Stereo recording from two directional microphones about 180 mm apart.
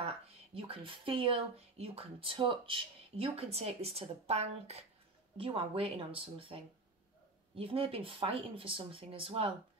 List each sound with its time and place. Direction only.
0.6 s speech: 30° right (ahead or behind)